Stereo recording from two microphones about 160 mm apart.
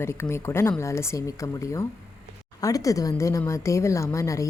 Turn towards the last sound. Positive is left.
turn(degrees=20)  # may be behind; listen again after turning